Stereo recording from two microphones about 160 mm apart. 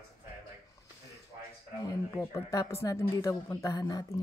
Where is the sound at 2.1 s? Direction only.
20° left (ahead or behind).